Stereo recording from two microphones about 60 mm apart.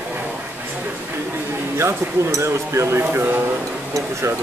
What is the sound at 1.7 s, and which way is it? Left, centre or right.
Speech, right.